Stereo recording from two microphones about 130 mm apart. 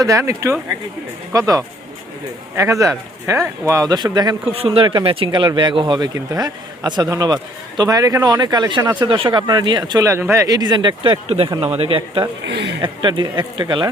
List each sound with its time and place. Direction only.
0.0 s speech: 25° right (ahead or behind)
4.5 s speech: 45° right (ahead or behind)